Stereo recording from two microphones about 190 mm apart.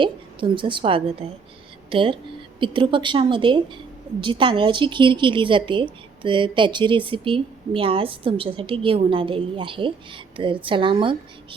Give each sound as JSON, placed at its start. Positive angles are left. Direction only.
{"t": 0.0, "sound": "a woman's voice", "side_deg": -25}